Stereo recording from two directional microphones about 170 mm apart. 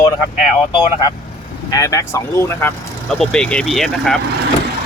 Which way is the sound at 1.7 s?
20° left (ahead or behind).